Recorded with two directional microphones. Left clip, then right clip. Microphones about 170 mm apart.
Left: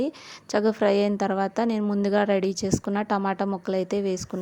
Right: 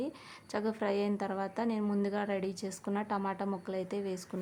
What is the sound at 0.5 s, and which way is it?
A woman's voice, 40° left (ahead or behind).